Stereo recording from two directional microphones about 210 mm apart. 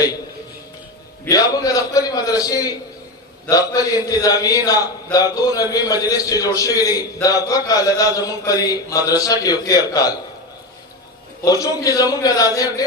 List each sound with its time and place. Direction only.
1.2 s a man's voice: 15° left (ahead or behind)
11.4 s a man's voice: 15° left (ahead or behind)